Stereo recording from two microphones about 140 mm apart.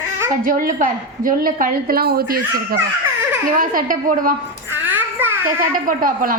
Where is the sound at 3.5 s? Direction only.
80° right.